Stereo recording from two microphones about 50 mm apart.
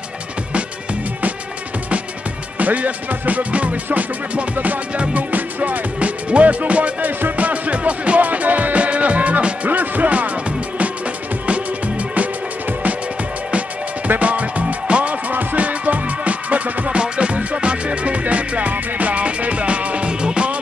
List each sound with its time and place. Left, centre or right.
2.6 s music: right
13.5 s music: right